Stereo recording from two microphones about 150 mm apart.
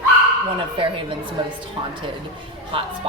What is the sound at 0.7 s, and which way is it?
Speech, 35° right (ahead or behind).